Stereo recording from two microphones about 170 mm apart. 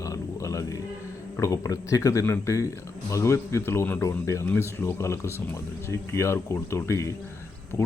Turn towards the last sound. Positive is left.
turn(degrees=15)  # may be behind; listen again after turning